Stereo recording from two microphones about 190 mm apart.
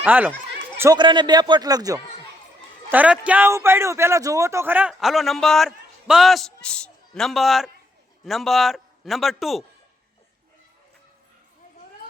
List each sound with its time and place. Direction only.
0.0 s speech: 10° right (ahead or behind)
0.8 s a man's voice: 20° right (ahead or behind)
2.9 s a man's voice: 5° right (ahead or behind)